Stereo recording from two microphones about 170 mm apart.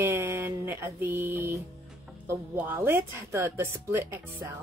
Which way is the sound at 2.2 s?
15° right (ahead or behind).